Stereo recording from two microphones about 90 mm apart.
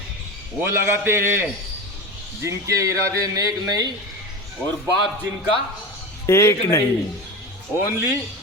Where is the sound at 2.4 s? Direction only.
35° right (ahead or behind).